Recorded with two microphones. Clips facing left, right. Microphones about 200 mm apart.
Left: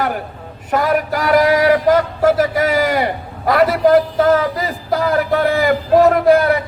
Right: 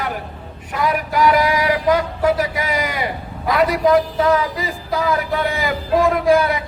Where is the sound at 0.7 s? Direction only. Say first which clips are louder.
Left 4 dB; 50° left (ahead or behind).